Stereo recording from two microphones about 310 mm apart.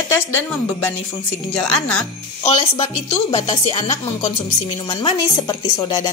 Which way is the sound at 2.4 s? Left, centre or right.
Centre.